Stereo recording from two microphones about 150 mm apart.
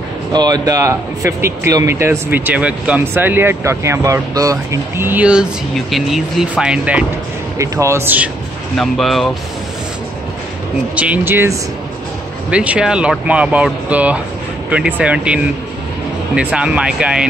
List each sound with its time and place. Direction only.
0.3 s speech: 25° right (ahead or behind); by 7.1 s 10° right (ahead or behind)
7.5 s speech: 20° right (ahead or behind)
8.7 s speech: centre (ahead or behind)
11.0 s speech: 10° right (ahead or behind)